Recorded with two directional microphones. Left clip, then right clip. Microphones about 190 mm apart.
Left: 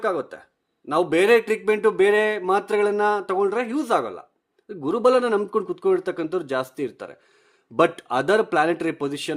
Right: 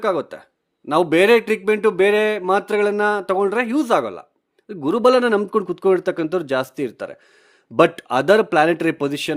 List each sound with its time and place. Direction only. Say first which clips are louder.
0.0 s speech: right 4 dB; 35° right (ahead or behind)